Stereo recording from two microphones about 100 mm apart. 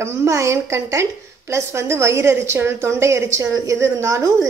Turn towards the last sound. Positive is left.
turn(degrees=-30)  # may be behind; listen again after turning